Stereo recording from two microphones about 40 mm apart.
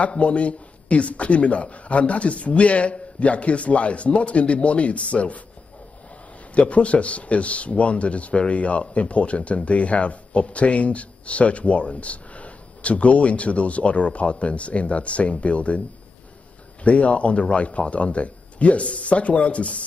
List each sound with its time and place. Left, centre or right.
0.0 s speech: left
6.5 s speech: left
16.8 s speech: left